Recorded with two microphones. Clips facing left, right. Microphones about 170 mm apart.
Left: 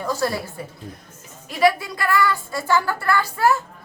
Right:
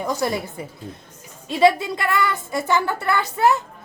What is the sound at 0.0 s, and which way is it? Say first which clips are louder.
Speech: right 1 dB; 20° right (ahead or behind).